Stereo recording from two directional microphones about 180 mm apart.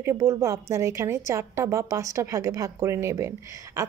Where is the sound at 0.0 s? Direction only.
15° right (ahead or behind).